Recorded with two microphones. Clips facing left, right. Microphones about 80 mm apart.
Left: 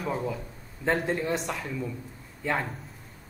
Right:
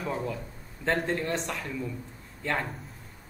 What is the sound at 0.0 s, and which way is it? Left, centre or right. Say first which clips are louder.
Speech: left 1 dB; centre.